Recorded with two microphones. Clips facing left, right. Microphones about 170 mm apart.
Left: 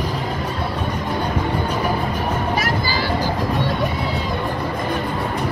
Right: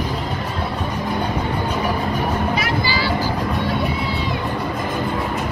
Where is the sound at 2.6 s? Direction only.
45° left (ahead or behind).